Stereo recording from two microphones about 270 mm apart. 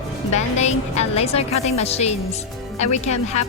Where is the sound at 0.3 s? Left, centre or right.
Left.